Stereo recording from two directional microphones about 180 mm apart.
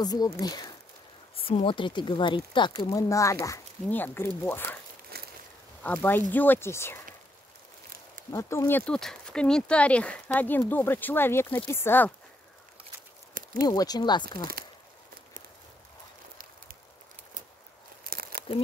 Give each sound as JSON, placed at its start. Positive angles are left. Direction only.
{"t": 0.0, "sound": "speech", "side_deg": 20}
{"t": 5.1, "sound": "a sound", "side_deg": -60}
{"t": 5.8, "sound": "speech", "side_deg": 10}
{"t": 8.3, "sound": "speech", "side_deg": 15}
{"t": 13.6, "sound": "speech", "side_deg": 20}
{"t": 18.0, "sound": "crumpling", "side_deg": -55}